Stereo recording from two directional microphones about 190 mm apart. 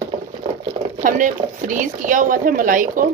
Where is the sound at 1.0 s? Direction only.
45° right (ahead or behind).